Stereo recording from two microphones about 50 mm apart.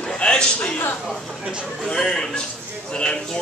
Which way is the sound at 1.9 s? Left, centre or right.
Centre.